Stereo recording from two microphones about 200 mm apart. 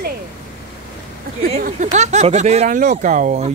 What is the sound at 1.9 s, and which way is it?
Speech, 35° right (ahead or behind).